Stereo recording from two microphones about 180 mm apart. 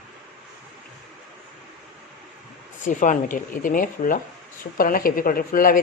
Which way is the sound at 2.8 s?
45° left (ahead or behind).